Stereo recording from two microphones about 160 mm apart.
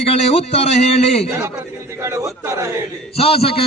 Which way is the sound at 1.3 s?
15° right (ahead or behind).